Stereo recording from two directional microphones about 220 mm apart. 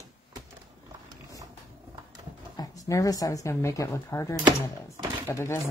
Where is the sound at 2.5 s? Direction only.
15° left (ahead or behind).